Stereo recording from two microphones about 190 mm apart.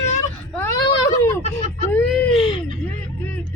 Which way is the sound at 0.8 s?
20° left (ahead or behind).